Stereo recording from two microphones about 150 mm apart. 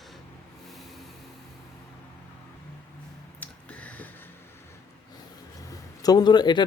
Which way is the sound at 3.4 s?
10° left (ahead or behind).